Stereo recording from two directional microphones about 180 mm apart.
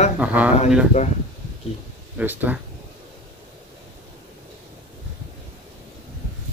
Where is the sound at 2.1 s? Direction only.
10° right (ahead or behind).